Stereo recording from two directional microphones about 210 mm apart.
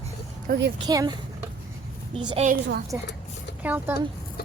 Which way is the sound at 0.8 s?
20° right (ahead or behind).